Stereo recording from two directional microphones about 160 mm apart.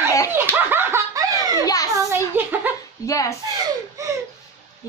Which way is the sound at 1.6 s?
20° left (ahead or behind).